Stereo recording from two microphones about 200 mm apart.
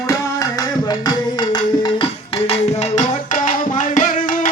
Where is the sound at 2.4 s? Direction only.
35° left (ahead or behind).